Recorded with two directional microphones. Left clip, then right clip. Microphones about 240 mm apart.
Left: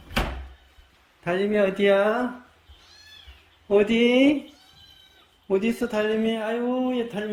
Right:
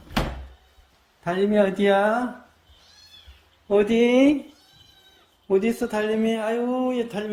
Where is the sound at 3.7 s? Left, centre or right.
Centre.